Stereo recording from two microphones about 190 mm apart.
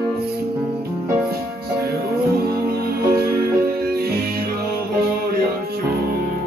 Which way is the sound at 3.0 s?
55° right (ahead or behind).